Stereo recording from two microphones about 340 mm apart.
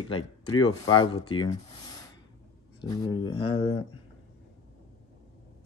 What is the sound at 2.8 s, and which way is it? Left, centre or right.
Speech, centre.